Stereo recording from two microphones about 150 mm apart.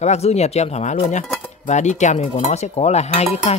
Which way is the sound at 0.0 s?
45° left (ahead or behind).